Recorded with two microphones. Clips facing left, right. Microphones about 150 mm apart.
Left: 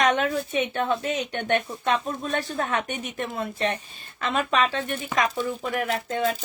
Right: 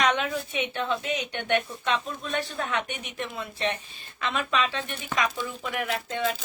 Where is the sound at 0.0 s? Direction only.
45° left (ahead or behind).